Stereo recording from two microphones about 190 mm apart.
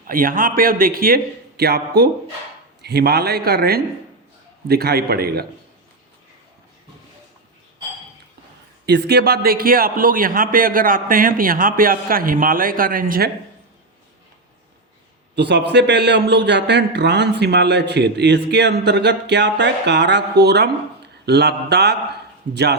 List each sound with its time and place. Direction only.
0.1 s a man's voice: 45° right (ahead or behind)
8.9 s a man's voice: 60° right (ahead or behind)
15.4 s a man's voice: 65° right (ahead or behind)